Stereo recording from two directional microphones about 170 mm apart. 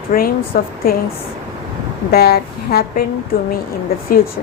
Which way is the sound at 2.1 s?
65° left (ahead or behind).